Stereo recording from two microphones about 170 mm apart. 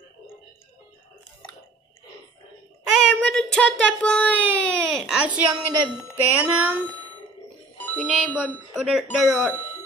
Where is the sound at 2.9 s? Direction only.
Centre (ahead or behind).